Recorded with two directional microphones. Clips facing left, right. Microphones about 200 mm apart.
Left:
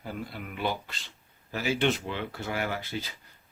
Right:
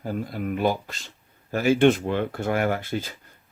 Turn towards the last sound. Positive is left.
turn(degrees=-50)  # may be behind; listen again after turning